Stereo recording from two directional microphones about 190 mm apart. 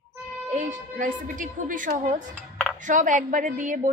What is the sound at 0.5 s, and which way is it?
A woman's voice, 45° right (ahead or behind).